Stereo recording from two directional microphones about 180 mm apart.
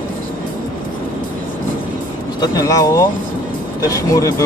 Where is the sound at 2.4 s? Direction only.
20° left (ahead or behind).